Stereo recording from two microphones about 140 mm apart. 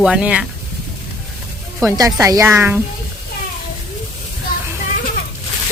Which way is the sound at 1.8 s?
20° right (ahead or behind).